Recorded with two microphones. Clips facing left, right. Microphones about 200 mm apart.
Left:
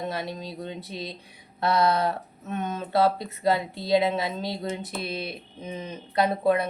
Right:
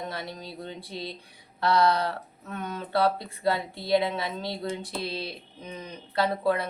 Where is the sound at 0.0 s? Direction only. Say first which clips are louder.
Left 4 dB; 25° left (ahead or behind).